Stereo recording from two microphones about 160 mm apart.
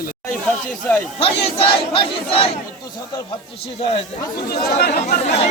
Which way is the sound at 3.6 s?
40° left (ahead or behind).